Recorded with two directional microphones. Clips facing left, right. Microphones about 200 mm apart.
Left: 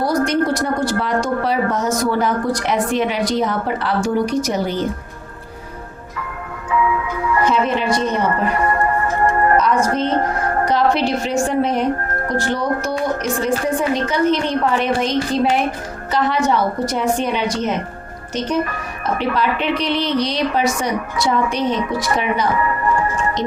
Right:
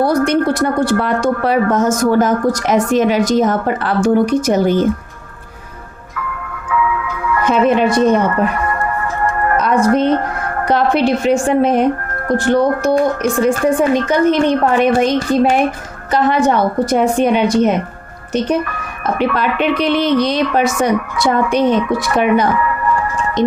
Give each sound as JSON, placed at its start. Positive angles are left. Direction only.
{"t": 0.0, "sound": "a woman's voice", "side_deg": -60}
{"t": 6.7, "sound": "tick-tock", "side_deg": 25}
{"t": 7.4, "sound": "a woman's voice", "side_deg": -50}
{"t": 9.6, "sound": "a woman's voice", "side_deg": -55}
{"t": 19.3, "sound": "a woman's voice", "side_deg": -55}